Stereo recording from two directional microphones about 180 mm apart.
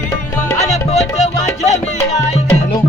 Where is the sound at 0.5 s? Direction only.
40° left (ahead or behind).